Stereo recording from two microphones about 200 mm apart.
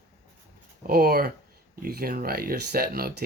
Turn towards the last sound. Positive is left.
turn(degrees=-50)  # may be behind; listen again after turning